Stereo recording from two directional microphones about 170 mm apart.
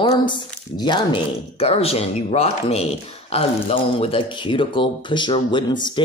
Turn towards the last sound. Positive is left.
turn(degrees=25)  # may be behind; listen again after turning